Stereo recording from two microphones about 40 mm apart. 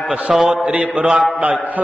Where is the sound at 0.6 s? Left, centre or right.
Right.